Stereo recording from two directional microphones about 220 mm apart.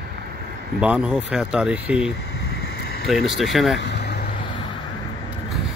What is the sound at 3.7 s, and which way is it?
Vehicle, 50° left (ahead or behind).